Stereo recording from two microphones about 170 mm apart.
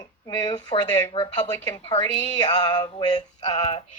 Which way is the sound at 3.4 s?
40° left (ahead or behind).